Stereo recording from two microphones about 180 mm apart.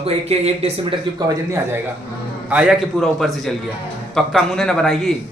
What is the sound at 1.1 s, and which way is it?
Speech, 15° right (ahead or behind).